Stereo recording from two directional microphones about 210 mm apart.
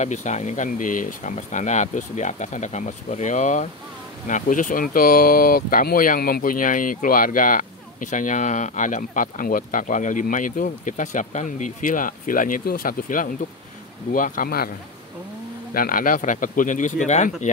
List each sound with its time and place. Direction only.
0.0 s speech: 35° left (ahead or behind)
15.7 s speech: 40° left (ahead or behind)